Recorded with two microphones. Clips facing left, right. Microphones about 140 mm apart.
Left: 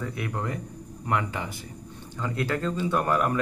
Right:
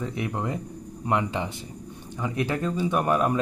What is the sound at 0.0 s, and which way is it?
Speech, 20° right (ahead or behind).